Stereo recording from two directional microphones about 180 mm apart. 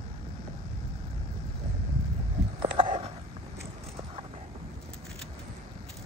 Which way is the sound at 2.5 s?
30° right (ahead or behind).